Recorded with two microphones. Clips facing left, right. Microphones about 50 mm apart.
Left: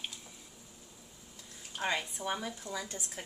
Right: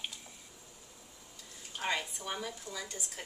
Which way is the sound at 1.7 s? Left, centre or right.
Centre.